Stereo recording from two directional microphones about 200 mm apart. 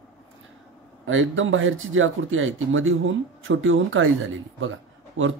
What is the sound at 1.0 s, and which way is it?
Speech, 80° right.